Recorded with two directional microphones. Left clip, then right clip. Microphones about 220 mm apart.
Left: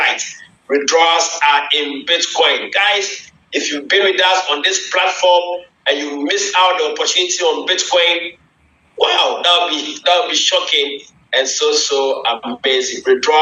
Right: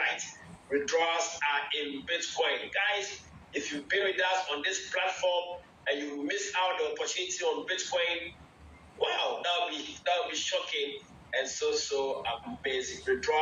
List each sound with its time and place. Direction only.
0.0 s a man's voice: 45° left (ahead or behind)